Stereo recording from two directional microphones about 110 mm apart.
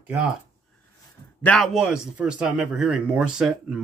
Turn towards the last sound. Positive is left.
turn(degrees=-5)  # may be behind; listen again after turning